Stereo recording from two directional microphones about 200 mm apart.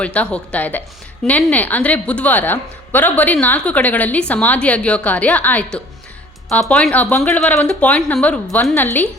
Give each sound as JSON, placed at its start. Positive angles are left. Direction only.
{"t": 0.0, "sound": "a woman's voice", "side_deg": 5}